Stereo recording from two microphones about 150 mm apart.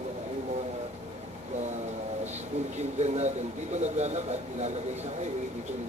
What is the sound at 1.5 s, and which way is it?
Speech, 50° right (ahead or behind).